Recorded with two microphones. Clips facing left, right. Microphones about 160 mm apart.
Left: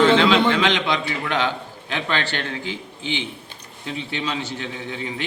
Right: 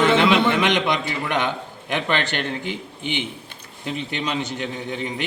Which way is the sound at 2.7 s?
20° right (ahead or behind).